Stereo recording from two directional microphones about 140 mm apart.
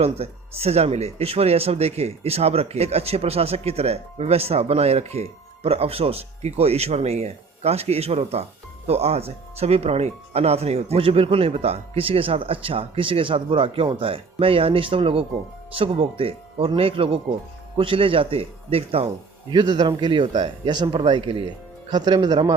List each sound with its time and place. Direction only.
0.0 s a man's voice: 45° right (ahead or behind)
19.5 s a man's voice: 30° right (ahead or behind)